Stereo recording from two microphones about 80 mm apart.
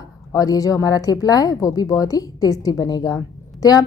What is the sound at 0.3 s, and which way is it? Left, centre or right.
A woman's voice, left.